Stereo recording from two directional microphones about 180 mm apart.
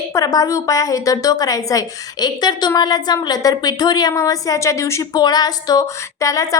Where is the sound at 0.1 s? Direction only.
20° left (ahead or behind).